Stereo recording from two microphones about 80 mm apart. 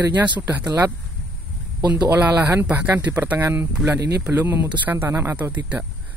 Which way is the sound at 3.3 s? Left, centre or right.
Right.